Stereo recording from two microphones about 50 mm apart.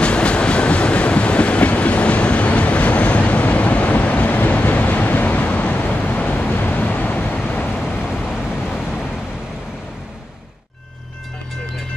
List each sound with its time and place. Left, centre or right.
0.0 s train: left
5.8 s vehicle: left
8.6 s vehicle: centre